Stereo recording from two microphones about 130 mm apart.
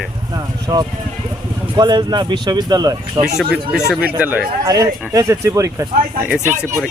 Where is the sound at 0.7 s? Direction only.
30° right (ahead or behind).